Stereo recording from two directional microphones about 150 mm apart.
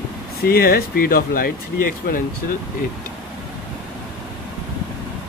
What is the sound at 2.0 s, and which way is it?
Speech, 90° left.